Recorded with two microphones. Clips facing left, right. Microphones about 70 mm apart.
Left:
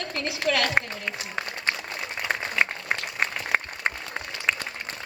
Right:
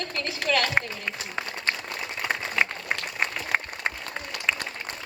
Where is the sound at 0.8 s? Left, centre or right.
Centre.